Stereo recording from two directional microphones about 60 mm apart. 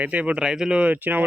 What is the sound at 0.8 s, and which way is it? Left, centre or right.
Speech, right.